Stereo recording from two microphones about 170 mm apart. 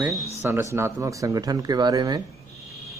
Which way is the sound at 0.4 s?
15° right (ahead or behind).